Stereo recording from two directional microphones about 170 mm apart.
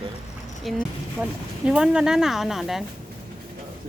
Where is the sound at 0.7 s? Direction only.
Centre (ahead or behind).